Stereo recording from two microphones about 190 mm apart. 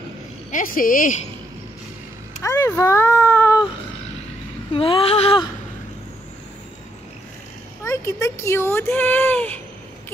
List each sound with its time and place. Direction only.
0.5 s speech: 45° left (ahead or behind)
2.4 s speech: 15° left (ahead or behind)
4.7 s a sound: 30° left (ahead or behind)
7.8 s speech: 15° left (ahead or behind)